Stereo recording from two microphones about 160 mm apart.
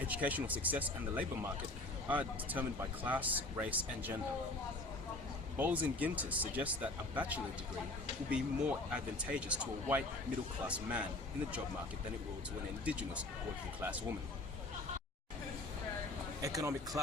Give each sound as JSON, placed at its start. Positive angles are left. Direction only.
{"t": 0.1, "sound": "speech", "side_deg": -10}
{"t": 5.5, "sound": "speech", "side_deg": -10}
{"t": 12.8, "sound": "speech", "side_deg": -10}
{"t": 16.4, "sound": "speech", "side_deg": -20}